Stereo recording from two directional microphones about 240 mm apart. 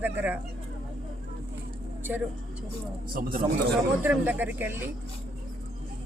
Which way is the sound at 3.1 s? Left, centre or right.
Right.